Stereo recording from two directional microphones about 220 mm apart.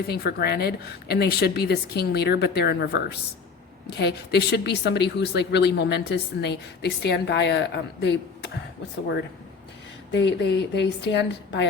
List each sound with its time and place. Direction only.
0.1 s a woman's voice: 45° left (ahead or behind)
10.1 s a woman's voice: 55° left (ahead or behind)